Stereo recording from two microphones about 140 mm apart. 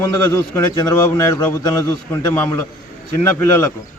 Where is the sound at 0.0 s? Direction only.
25° left (ahead or behind).